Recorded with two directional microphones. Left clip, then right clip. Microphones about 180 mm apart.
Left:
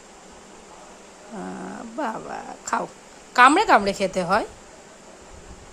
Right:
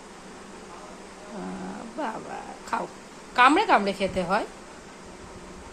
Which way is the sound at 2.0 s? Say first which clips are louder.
Left 4 dB; 55° left (ahead or behind).